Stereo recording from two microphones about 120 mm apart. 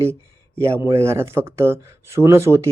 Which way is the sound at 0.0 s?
20° right (ahead or behind).